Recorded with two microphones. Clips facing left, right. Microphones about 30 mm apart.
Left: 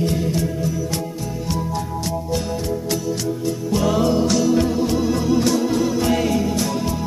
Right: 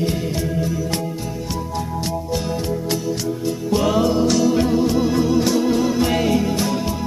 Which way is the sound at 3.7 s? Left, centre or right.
Centre.